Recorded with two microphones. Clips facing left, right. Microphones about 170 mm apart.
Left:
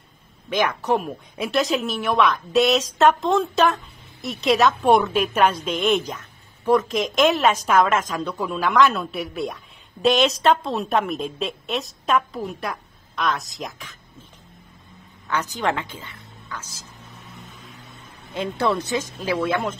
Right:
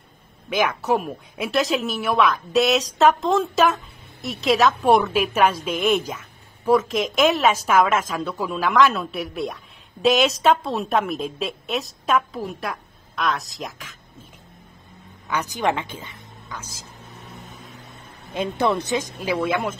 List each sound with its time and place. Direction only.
0.5 s speech: 5° right (ahead or behind)
15.2 s speech: 10° right (ahead or behind)
18.3 s speech: 15° right (ahead or behind)